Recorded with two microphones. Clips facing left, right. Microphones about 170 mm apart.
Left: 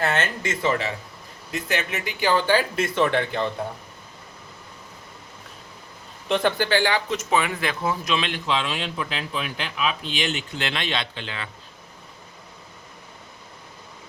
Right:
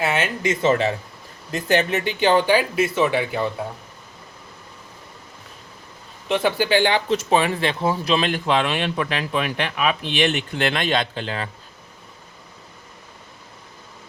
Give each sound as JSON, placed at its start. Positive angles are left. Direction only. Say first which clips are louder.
{"t": 0.0, "sound": "speech", "louder": "right 2 dB", "side_deg": -10}
{"t": 6.2, "sound": "speech", "louder": "right 2 dB", "side_deg": -5}